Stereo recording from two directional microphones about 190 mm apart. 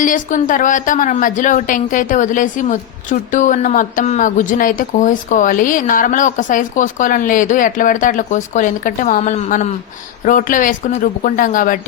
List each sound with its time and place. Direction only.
0.0 s a woman's voice: 45° left (ahead or behind)